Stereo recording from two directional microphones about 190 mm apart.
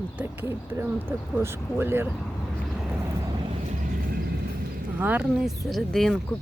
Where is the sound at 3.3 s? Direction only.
25° right (ahead or behind).